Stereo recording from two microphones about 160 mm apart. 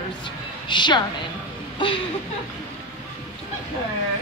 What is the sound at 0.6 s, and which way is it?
A woman's voice, 30° left (ahead or behind).